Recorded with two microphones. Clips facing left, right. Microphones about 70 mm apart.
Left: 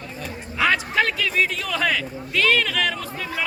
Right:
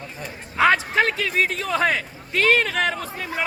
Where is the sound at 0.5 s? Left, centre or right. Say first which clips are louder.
Right 3 dB; right.